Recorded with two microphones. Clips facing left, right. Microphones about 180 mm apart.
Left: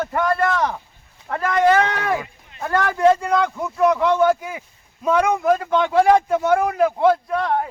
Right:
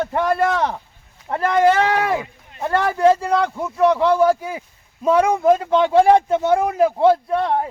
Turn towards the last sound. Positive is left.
turn(degrees=-30)  # may be behind; listen again after turning